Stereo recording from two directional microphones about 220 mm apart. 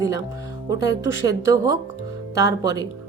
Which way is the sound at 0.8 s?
55° left (ahead or behind).